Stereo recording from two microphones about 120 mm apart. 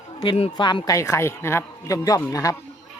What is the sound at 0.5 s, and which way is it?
Speech, 40° left (ahead or behind).